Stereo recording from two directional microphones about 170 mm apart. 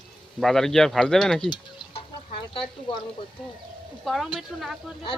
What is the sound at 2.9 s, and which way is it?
Speech, 30° left (ahead or behind).